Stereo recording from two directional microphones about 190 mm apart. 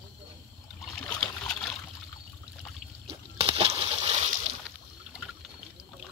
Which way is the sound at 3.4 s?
30° right (ahead or behind).